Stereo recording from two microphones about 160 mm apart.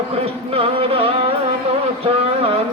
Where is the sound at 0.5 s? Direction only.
35° right (ahead or behind).